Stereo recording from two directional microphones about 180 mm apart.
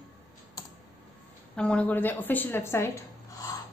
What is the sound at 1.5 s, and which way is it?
Speech, 5° left (ahead or behind).